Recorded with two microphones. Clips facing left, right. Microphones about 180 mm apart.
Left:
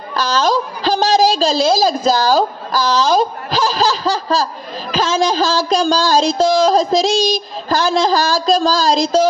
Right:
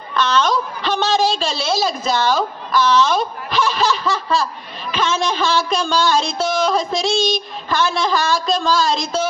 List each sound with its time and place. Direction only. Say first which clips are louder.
0.1 s a woman's voice: left 1 dB; 35° left (ahead or behind)